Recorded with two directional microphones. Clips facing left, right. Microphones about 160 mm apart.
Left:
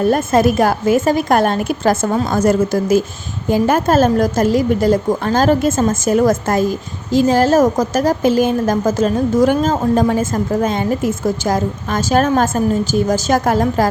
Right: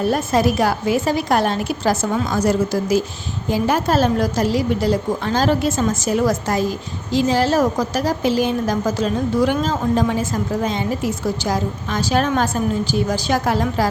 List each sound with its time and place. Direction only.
0.1 s a woman's voice: 50° left (ahead or behind)